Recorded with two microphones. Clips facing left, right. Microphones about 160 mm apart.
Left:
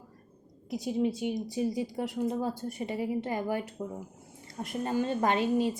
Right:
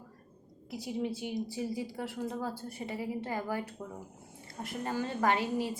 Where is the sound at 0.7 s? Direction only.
20° left (ahead or behind).